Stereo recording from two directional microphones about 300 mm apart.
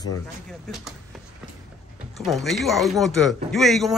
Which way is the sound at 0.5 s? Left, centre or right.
Centre.